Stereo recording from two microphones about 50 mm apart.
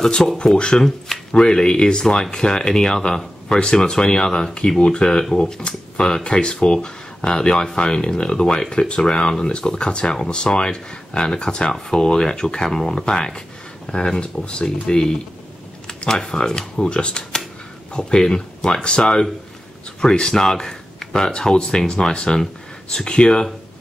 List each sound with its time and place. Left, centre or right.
0.0 s speech: centre